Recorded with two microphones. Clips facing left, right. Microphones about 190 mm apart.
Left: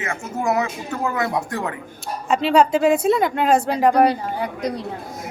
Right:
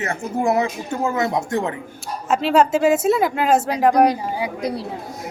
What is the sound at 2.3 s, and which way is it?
Speech, 5° right (ahead or behind).